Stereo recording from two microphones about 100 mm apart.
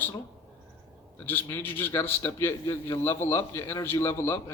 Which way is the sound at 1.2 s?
20° left (ahead or behind).